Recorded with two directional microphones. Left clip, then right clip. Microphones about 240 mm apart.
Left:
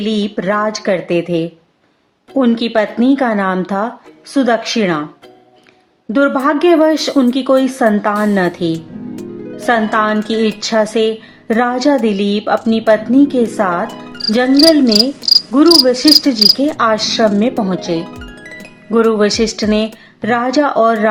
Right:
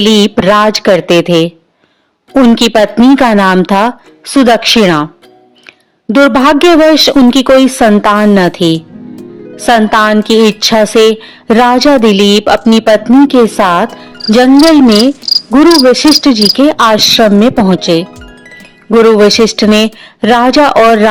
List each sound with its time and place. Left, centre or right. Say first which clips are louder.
0.0 s speech: right 11 dB; right
6.1 s speech: right 7 dB; right
13.9 s music: right 1 dB; centre
14.3 s speech: right 5 dB; right
15.1 s cricket: even; centre
15.4 s cricket: right 6 dB; right
15.9 s speech: right 4 dB; right
18.0 s music: right 3 dB; centre
18.9 s speech: right 8 dB; right